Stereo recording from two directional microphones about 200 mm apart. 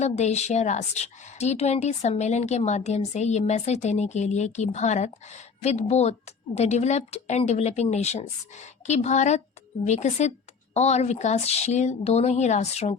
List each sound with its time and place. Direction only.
0.0 s a woman's voice: 35° left (ahead or behind)